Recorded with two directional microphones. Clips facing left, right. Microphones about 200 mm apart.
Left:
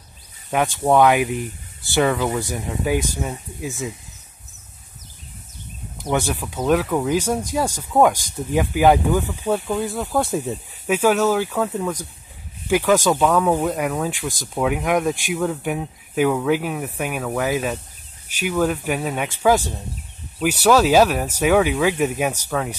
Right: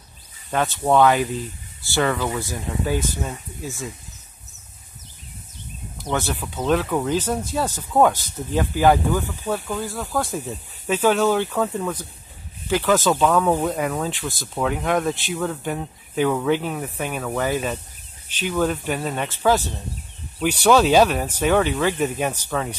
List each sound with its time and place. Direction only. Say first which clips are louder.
0.5 s speech: left 2 dB; 15° left (ahead or behind)
5.9 s speech: left 3 dB; 15° left (ahead or behind)
10.9 s speech: left 1 dB; 10° left (ahead or behind)